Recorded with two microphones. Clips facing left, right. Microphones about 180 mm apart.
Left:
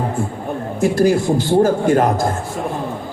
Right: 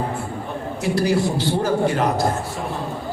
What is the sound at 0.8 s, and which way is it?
A man's voice, 50° left (ahead or behind).